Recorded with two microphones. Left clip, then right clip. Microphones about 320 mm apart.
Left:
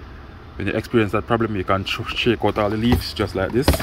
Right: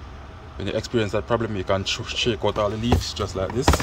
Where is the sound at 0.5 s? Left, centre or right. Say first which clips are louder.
Left 4 dB; centre.